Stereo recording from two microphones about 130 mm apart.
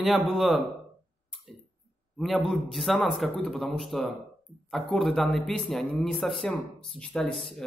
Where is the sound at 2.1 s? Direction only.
Centre (ahead or behind).